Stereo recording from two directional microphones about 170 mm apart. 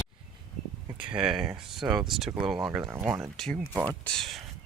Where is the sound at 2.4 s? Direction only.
20° right (ahead or behind).